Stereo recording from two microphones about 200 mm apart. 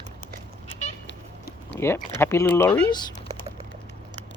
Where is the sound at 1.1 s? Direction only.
60° left (ahead or behind).